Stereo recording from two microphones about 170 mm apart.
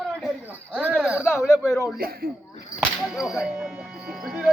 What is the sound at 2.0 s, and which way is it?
Speech, 65° right (ahead or behind).